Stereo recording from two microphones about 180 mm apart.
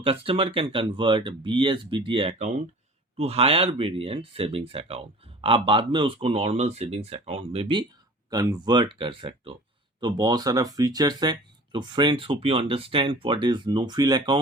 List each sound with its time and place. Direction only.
0.0 s speech: 30° right (ahead or behind)